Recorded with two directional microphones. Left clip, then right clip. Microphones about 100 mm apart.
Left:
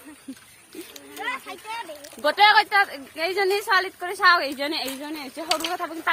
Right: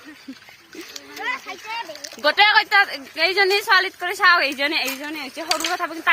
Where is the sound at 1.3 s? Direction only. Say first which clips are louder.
Right 4 dB; 90° right.